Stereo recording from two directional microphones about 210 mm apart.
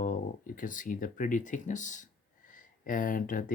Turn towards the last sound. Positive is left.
turn(degrees=40)  # may be behind; listen again after turning